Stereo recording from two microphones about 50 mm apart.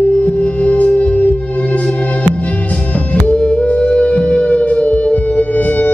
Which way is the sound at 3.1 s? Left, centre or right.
Left.